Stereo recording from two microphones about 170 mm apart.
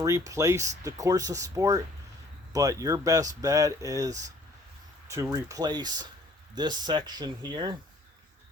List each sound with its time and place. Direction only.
0.0 s speech: 20° right (ahead or behind)